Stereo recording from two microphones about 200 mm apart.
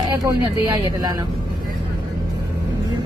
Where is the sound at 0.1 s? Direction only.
15° right (ahead or behind).